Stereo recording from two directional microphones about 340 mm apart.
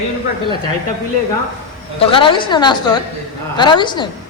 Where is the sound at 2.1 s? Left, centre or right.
Centre.